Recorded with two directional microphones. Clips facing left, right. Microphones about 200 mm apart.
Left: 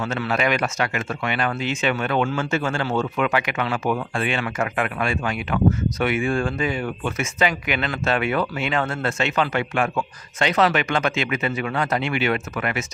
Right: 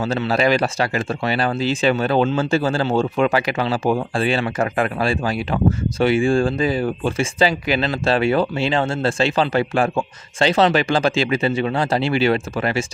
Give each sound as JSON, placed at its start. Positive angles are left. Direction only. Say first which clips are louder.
{"t": 0.0, "sound": "speech", "louder": "right 4 dB", "side_deg": -30}